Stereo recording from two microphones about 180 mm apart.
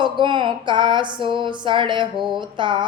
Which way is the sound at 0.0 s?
25° right (ahead or behind).